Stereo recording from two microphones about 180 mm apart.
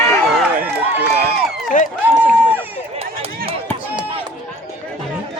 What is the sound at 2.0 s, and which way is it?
Run, 10° right (ahead or behind).